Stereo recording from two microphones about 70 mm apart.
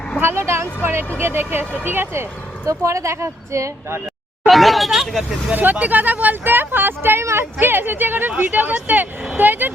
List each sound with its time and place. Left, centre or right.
0.2 s speech: right
2.6 s speech: right
4.4 s speech: centre
5.5 s speech: right